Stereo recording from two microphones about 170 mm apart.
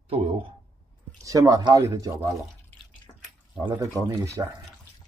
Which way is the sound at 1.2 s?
20° right (ahead or behind).